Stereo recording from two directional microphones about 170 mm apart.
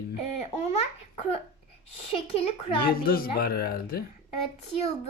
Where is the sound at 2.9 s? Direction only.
60° left (ahead or behind).